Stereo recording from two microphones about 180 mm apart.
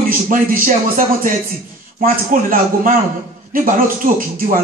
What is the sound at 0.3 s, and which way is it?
A man's voice, 50° right (ahead or behind).